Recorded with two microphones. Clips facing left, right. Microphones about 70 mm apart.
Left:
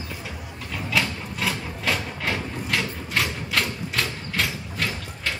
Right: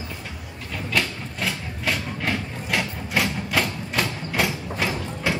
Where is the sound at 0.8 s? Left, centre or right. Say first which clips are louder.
Even; centre.